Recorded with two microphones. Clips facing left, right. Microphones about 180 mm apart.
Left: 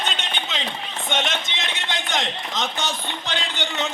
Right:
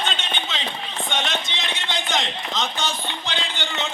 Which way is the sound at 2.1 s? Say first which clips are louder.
Right 1 dB; 20° left (ahead or behind).